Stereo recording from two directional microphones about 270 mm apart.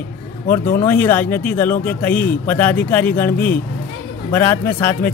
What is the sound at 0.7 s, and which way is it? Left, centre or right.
Speech, centre.